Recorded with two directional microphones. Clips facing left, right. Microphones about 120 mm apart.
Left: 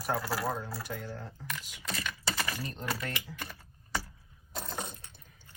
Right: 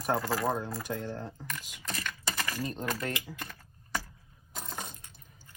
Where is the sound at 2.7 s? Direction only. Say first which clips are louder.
Right 3 dB; 10° right (ahead or behind).